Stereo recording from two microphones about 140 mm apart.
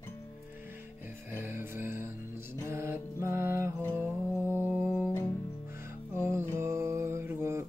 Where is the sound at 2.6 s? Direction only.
20° right (ahead or behind).